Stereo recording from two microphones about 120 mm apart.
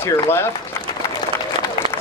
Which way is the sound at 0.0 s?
20° left (ahead or behind).